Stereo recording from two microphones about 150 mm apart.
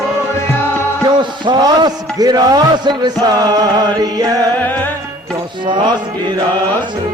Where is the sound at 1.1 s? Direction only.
30° right (ahead or behind).